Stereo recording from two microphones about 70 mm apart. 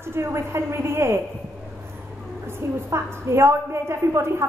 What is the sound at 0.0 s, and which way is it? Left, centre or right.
A woman's voice, right.